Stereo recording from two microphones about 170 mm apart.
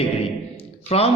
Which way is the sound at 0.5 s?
35° left (ahead or behind).